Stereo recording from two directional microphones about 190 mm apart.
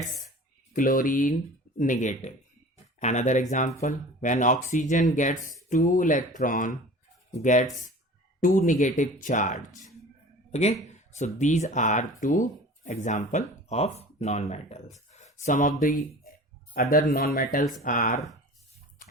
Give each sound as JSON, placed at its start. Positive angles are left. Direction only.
{"t": 0.7, "sound": "speech", "side_deg": 45}
{"t": 16.7, "sound": "speech", "side_deg": 55}